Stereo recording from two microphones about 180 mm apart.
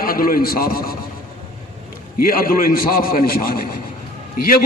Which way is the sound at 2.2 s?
55° left (ahead or behind).